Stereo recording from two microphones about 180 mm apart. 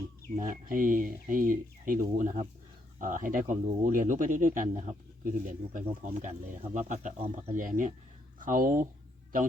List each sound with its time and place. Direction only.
0.3 s speech: 50° right (ahead or behind)
5.8 s speech: 35° right (ahead or behind)